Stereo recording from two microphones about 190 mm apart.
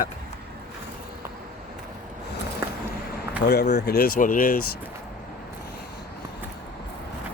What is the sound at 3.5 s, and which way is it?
Speech, 60° left (ahead or behind).